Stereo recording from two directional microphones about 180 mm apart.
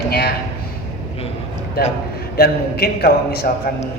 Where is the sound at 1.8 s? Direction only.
60° left (ahead or behind).